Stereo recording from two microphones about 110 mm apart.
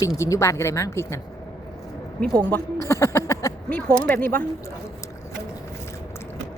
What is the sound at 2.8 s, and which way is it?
Speech, 25° left (ahead or behind).